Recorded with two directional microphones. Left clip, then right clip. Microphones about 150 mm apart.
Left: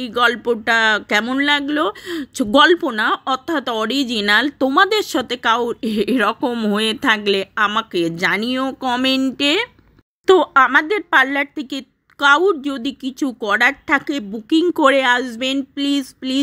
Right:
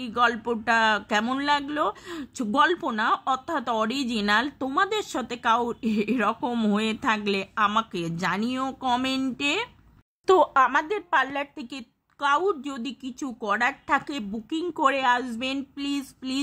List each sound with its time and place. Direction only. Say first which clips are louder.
0.0 s a woman's voice: left 7 dB; 20° left (ahead or behind)
2.4 s speech: left 9 dB; 35° left (ahead or behind)
2.7 s a woman's voice: left 8 dB; 15° left (ahead or behind)
10.2 s a woman's voice: left 7 dB; 10° left (ahead or behind); by 12.4 s 30° left (ahead or behind)
12.4 s a woman's voice: left 9 dB; 15° left (ahead or behind)
14.5 s a woman's voice: left 10 dB; 30° left (ahead or behind)